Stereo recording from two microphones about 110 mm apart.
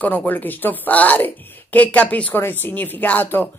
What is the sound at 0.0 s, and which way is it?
Speech, 15° left (ahead or behind).